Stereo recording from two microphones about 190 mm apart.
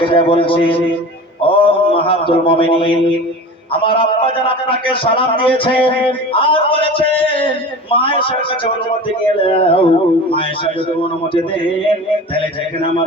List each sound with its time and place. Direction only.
0.0 s speech: 25° left (ahead or behind)
12.3 s speech: 30° left (ahead or behind)